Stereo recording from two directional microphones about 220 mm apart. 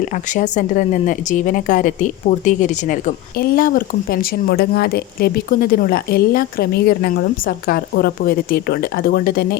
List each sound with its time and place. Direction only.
0.3 s a woman's voice: 35° left (ahead or behind)